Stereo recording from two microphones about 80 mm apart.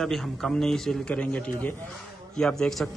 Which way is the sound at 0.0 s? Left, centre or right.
Centre.